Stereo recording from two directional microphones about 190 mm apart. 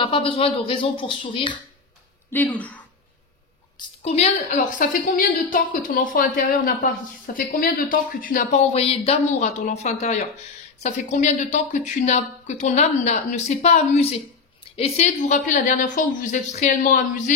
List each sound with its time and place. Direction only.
0.0 s speech: 25° left (ahead or behind)
2.3 s speech: 10° left (ahead or behind)
3.7 s a woman's voice: 35° left (ahead or behind)